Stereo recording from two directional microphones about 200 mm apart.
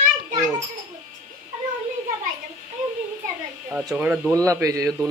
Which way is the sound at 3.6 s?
10° right (ahead or behind).